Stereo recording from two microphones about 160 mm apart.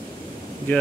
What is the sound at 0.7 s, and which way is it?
Speech, 10° left (ahead or behind).